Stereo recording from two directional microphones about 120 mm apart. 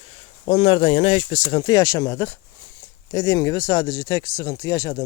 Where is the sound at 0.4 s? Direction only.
50° left (ahead or behind).